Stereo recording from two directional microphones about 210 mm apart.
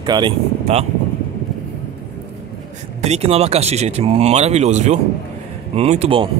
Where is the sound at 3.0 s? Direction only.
30° right (ahead or behind).